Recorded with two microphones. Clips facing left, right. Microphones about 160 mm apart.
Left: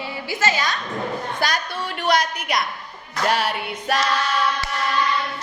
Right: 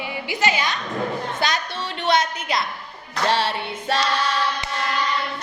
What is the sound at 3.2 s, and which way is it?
Music, 30° right (ahead or behind).